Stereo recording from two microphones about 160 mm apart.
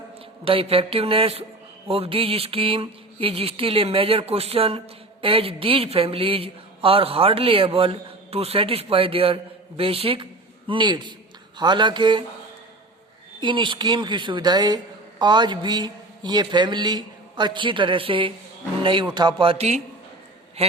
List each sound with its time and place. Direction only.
0.4 s a man's voice: 35° right (ahead or behind)
13.4 s a man's voice: 30° right (ahead or behind)